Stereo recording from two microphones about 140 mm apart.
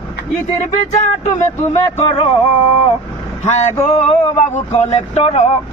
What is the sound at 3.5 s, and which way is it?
Speech, 60° left (ahead or behind).